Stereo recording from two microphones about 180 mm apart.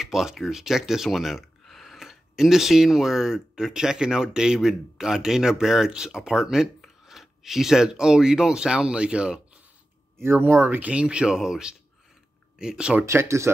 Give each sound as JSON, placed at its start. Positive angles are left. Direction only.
{"t": 0.0, "sound": "speech", "side_deg": 0}